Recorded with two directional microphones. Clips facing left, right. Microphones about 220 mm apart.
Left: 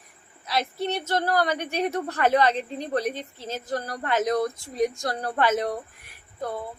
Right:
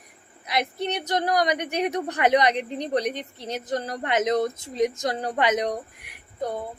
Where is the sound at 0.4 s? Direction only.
15° right (ahead or behind).